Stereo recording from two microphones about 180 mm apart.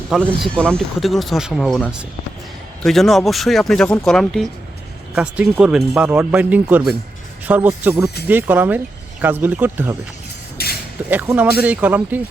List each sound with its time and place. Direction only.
0.3 s speech: centre (ahead or behind)
10.6 s a sound: 60° left (ahead or behind)
11.1 s speech: 10° right (ahead or behind)